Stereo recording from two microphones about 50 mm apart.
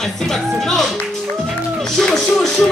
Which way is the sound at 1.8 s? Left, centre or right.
Centre.